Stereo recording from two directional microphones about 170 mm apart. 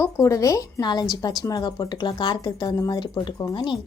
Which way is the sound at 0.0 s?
20° left (ahead or behind).